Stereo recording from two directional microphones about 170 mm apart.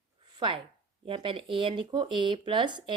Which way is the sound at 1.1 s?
30° right (ahead or behind).